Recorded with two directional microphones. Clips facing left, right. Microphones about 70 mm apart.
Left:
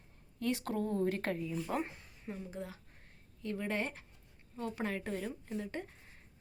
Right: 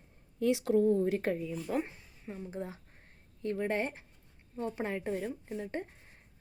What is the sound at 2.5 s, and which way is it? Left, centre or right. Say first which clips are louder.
A woman's voice: right 4 dB; right.